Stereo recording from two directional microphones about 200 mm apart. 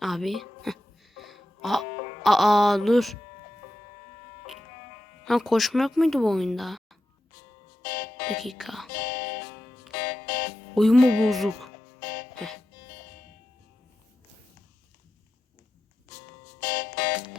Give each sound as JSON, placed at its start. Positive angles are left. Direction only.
{"t": 0.0, "sound": "music", "side_deg": 0}
{"t": 5.2, "sound": "speech", "side_deg": 0}
{"t": 7.8, "sound": "music", "side_deg": 50}
{"t": 8.4, "sound": "speech", "side_deg": 0}
{"t": 8.9, "sound": "music", "side_deg": 50}
{"t": 10.8, "sound": "speech", "side_deg": 0}
{"t": 11.9, "sound": "music", "side_deg": 50}
{"t": 16.6, "sound": "music", "side_deg": 50}